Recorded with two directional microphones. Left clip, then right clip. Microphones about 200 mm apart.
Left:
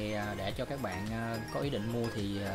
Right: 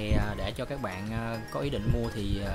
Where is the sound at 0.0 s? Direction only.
10° right (ahead or behind).